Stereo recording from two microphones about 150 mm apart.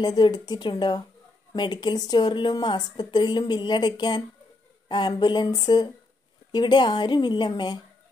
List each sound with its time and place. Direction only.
0.0 s speech: 25° left (ahead or behind)